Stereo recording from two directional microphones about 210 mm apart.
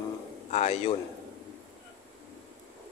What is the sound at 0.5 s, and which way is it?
Speech, 30° left (ahead or behind).